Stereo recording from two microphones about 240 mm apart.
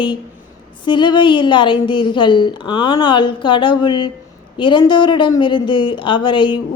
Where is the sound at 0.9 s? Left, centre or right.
Centre.